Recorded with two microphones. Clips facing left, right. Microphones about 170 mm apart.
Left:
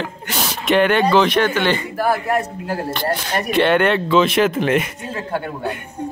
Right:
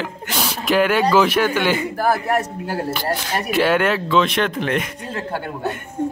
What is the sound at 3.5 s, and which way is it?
Speech, 5° right (ahead or behind).